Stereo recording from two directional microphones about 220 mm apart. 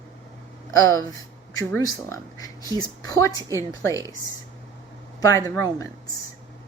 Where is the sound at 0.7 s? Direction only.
15° left (ahead or behind).